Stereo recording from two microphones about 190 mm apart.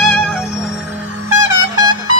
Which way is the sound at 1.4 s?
20° right (ahead or behind).